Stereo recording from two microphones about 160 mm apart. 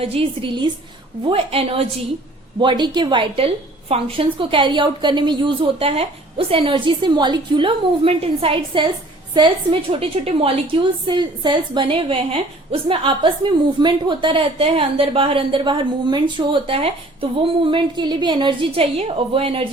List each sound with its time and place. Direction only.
0.0 s a woman's voice: 35° right (ahead or behind)